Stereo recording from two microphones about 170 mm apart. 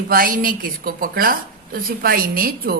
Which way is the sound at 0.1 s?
55° right (ahead or behind).